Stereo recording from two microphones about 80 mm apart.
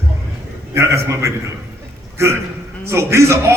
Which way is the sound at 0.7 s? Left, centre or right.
Right.